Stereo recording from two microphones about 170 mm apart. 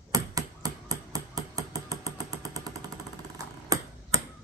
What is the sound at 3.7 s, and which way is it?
Ping, 20° right (ahead or behind).